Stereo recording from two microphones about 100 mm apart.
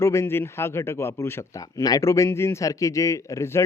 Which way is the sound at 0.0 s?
30° left (ahead or behind).